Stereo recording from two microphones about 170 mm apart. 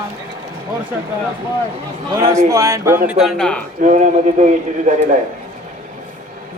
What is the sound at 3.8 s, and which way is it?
A man's voice, 45° right (ahead or behind).